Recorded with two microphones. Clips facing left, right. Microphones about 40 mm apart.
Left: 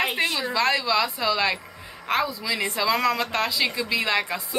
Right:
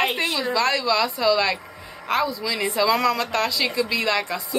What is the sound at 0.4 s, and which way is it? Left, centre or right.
A woman's voice, centre.